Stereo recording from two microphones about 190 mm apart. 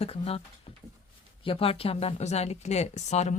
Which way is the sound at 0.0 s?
30° left (ahead or behind).